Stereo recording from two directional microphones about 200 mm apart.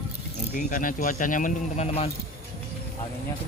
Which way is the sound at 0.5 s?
40° left (ahead or behind).